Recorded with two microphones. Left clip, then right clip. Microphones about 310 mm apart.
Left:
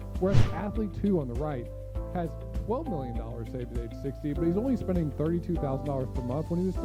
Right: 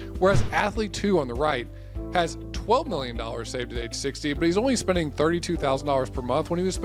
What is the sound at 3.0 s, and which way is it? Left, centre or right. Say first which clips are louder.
Speech: right 7 dB; centre.